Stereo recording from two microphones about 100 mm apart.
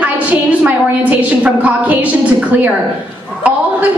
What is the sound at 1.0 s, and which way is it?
A woman's voice, 15° right (ahead or behind).